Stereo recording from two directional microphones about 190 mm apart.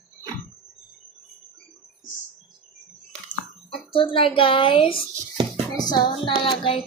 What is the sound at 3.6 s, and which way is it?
A child's voice, 30° left (ahead or behind).